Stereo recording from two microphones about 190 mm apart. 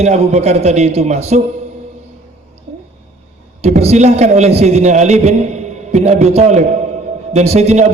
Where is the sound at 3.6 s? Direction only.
35° right (ahead or behind).